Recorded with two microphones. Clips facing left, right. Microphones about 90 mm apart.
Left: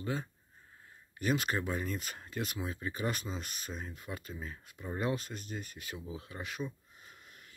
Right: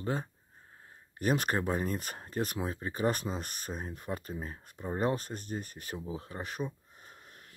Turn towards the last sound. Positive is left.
turn(degrees=-40)  # may be behind; listen again after turning